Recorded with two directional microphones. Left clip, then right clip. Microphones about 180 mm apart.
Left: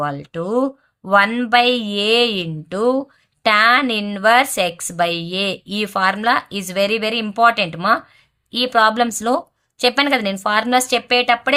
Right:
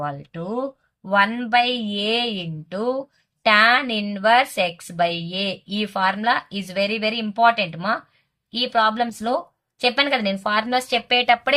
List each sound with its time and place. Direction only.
0.0 s a woman's voice: 45° left (ahead or behind); by 11.5 s 30° left (ahead or behind)